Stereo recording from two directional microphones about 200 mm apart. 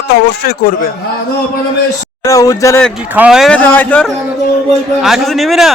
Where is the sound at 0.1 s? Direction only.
50° left (ahead or behind).